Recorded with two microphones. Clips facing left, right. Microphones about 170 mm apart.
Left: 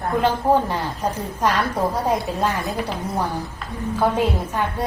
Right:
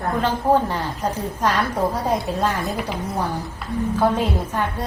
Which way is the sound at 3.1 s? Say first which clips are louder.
Even; 10° left (ahead or behind).